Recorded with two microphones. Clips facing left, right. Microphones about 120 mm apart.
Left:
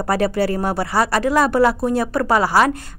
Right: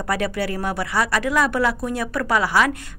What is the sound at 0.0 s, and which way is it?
Speech, 35° left (ahead or behind).